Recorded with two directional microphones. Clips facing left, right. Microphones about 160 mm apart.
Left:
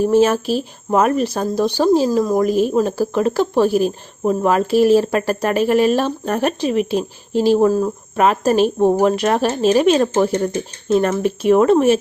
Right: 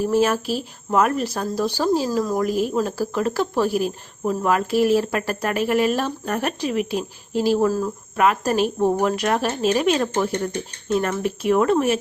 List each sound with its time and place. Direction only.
0.0 s speech: 25° left (ahead or behind)